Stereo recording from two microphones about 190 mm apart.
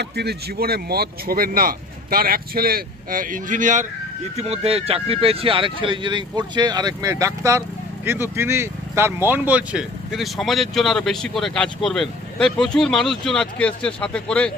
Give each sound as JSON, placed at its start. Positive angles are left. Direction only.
{"t": 0.0, "sound": "speech", "side_deg": -60}